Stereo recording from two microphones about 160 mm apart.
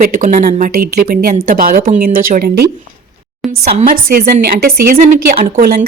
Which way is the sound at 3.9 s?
60° right (ahead or behind).